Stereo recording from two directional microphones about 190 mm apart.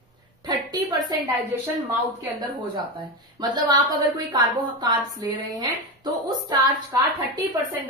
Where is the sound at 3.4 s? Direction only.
20° right (ahead or behind).